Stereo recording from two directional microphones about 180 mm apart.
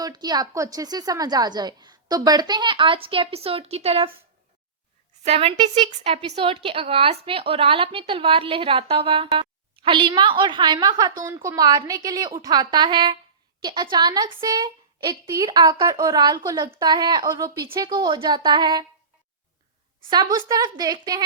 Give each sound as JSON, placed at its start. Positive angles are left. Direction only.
{"t": 0.0, "sound": "a woman's voice", "side_deg": -20}
{"t": 5.2, "sound": "a woman's voice", "side_deg": -35}
{"t": 20.0, "sound": "a woman's voice", "side_deg": -25}